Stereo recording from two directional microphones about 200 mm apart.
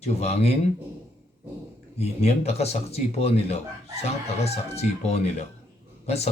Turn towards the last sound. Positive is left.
turn(degrees=30)  # may be behind; listen again after turning